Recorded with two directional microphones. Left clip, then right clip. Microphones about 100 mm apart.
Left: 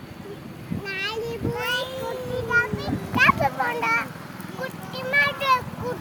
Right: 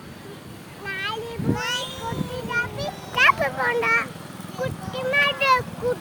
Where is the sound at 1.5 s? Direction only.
20° left (ahead or behind).